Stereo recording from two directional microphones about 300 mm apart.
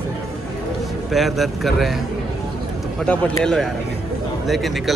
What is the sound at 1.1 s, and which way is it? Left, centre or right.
Speech, centre.